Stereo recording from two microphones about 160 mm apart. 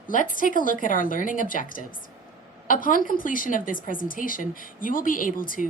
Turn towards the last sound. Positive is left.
turn(degrees=60)  # may be behind; listen again after turning